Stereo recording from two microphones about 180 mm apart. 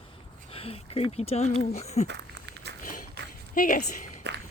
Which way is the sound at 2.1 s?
70° right (ahead or behind).